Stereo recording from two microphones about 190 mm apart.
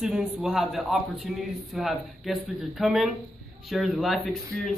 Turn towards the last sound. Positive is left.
turn(degrees=0)  # may be behind; listen again after turning